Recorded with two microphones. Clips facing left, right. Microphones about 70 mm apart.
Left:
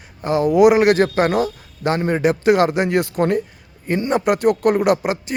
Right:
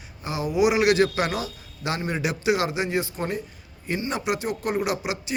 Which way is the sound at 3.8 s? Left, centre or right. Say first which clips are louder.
Left 9 dB; left.